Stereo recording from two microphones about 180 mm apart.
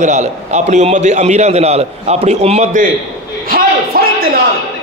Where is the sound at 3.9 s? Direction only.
55° right (ahead or behind).